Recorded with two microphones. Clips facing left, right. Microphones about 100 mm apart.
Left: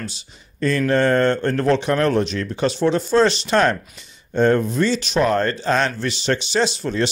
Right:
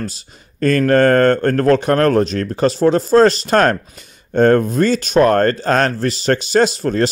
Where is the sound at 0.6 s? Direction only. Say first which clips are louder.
Right 5 dB; 55° right (ahead or behind).